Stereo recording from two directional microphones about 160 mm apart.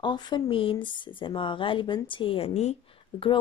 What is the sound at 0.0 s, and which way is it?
A woman's voice, 25° left (ahead or behind).